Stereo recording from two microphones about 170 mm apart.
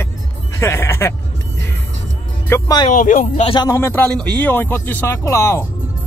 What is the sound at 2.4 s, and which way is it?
Speech, 20° left (ahead or behind).